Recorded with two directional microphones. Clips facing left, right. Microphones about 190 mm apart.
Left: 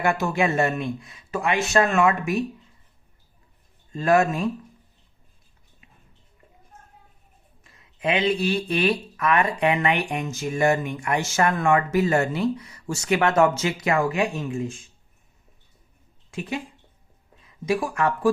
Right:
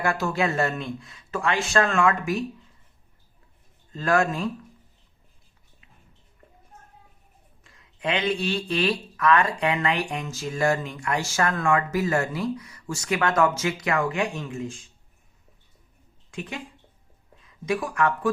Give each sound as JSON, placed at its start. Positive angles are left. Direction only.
{"t": 0.0, "sound": "speech", "side_deg": 20}
{"t": 3.9, "sound": "speech", "side_deg": 20}
{"t": 7.6, "sound": "a sound", "side_deg": 20}
{"t": 8.4, "sound": "speech", "side_deg": 20}
{"t": 16.3, "sound": "speech", "side_deg": 20}
{"t": 17.7, "sound": "speech", "side_deg": 25}